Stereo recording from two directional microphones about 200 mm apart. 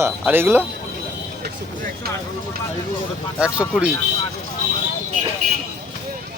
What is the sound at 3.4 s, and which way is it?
Speech, 5° right (ahead or behind).